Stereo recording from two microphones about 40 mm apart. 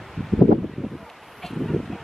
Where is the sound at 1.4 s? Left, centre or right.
Centre.